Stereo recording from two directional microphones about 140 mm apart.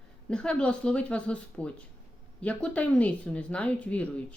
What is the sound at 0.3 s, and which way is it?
Speech, 5° left (ahead or behind).